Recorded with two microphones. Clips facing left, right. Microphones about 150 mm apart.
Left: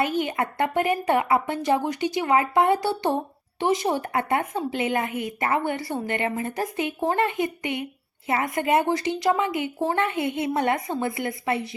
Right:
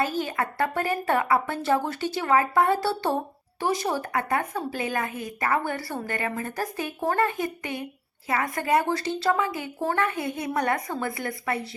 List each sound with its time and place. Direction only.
0.0 s a woman's voice: 20° left (ahead or behind)